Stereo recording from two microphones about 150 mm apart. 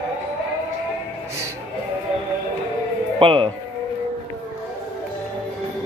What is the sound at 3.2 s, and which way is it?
Speech, 35° right (ahead or behind).